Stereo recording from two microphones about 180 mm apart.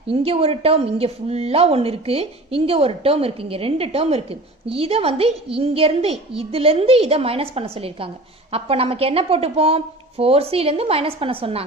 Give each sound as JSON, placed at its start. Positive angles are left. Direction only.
{"t": 0.1, "sound": "a woman's voice", "side_deg": -30}